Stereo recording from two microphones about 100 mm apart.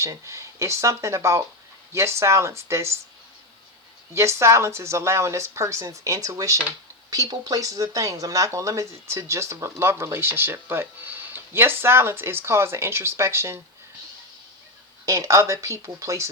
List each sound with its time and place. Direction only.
0.0 s speech: 30° right (ahead or behind)
4.1 s speech: 30° right (ahead or behind)
15.0 s speech: 30° right (ahead or behind)